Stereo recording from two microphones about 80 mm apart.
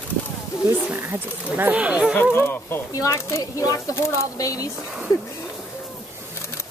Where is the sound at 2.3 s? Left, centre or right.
Left.